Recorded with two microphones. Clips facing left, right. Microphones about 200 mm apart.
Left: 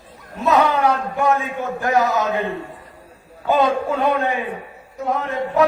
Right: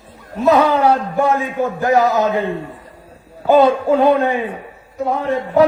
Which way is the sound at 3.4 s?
30° right (ahead or behind).